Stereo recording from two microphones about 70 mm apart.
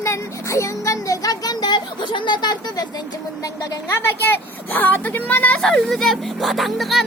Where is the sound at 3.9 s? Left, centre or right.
Left.